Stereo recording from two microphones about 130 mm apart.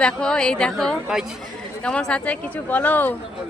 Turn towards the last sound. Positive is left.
turn(degrees=10)  # may be behind; listen again after turning